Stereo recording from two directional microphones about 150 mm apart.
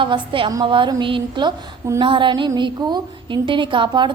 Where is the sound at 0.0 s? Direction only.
35° right (ahead or behind).